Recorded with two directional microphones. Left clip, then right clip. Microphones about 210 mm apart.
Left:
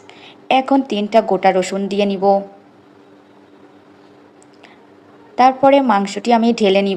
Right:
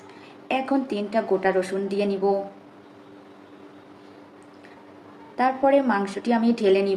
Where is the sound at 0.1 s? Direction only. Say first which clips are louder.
Left 11 dB; 45° left (ahead or behind).